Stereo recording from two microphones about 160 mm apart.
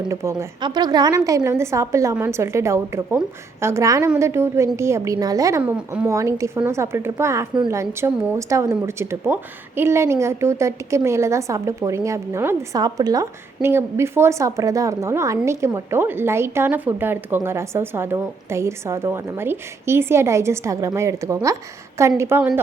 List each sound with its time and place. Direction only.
0.1 s a woman's voice: 15° right (ahead or behind)
5.7 s a woman's voice: 5° right (ahead or behind)
6.1 s a woman's voice: 20° right (ahead or behind)